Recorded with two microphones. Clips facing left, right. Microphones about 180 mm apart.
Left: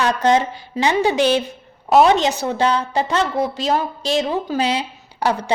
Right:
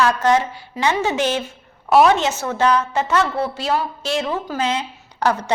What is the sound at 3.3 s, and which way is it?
A woman's voice, 15° left (ahead or behind).